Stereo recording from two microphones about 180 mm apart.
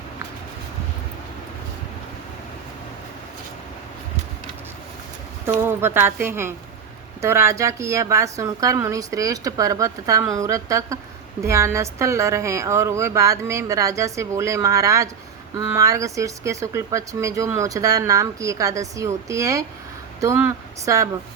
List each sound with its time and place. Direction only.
5.6 s speech: 10° right (ahead or behind)